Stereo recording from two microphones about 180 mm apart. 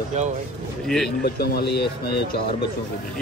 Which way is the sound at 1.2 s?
60° left (ahead or behind).